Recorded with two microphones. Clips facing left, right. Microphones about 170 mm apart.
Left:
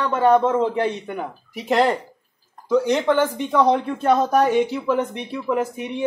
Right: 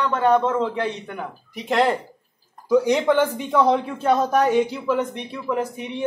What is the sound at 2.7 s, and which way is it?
Speech, 10° right (ahead or behind).